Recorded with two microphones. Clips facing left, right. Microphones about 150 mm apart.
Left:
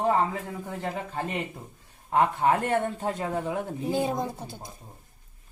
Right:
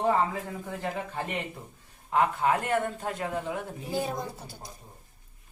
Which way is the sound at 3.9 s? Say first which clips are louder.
Left 3 dB; 20° left (ahead or behind).